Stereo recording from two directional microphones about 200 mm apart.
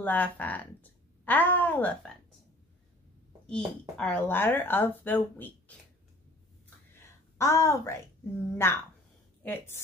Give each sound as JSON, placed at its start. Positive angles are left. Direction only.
{"t": 0.0, "sound": "speech", "side_deg": 10}
{"t": 3.4, "sound": "speech", "side_deg": 5}
{"t": 7.3, "sound": "a woman's voice", "side_deg": 15}